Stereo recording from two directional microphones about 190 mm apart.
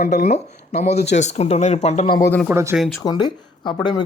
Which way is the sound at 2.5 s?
15° right (ahead or behind).